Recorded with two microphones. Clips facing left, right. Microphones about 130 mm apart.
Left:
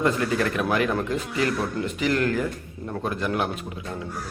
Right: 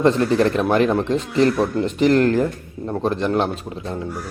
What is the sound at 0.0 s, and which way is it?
Speech, 30° right (ahead or behind).